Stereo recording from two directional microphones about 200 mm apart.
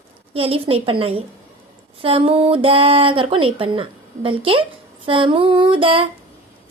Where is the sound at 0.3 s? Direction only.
30° right (ahead or behind).